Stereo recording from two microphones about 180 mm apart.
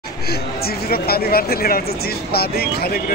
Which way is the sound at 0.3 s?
60° left (ahead or behind).